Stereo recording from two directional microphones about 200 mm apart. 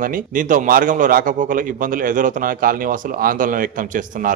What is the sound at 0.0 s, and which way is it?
A man's voice, 40° right (ahead or behind).